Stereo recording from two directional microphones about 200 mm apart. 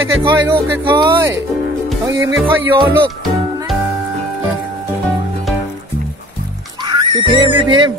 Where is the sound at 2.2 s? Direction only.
65° right (ahead or behind).